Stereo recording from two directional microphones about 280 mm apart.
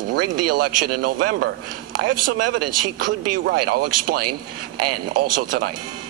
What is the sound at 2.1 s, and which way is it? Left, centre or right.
Speech, right.